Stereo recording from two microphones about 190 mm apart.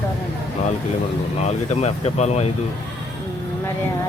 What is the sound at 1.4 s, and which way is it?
Speech, 35° left (ahead or behind).